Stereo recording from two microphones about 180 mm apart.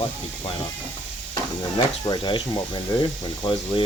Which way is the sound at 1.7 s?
25° left (ahead or behind).